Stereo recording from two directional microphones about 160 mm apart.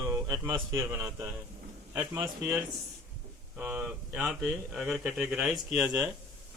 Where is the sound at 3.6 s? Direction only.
10° right (ahead or behind).